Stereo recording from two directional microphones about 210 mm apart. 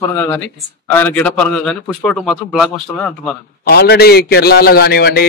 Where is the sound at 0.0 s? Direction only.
10° left (ahead or behind).